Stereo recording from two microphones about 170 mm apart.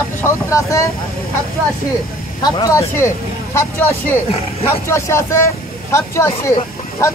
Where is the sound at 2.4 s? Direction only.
20° left (ahead or behind).